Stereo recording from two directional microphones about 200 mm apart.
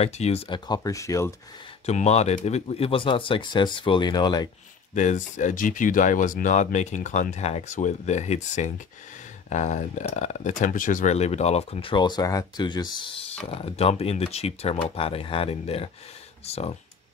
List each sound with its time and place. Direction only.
0.0 s speech: 30° left (ahead or behind); by 1.3 s 15° left (ahead or behind)
1.9 s speech: 35° left (ahead or behind)
4.9 s speech: 40° left (ahead or behind)